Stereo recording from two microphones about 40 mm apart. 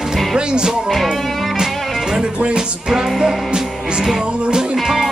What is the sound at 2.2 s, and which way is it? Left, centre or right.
Speech, right.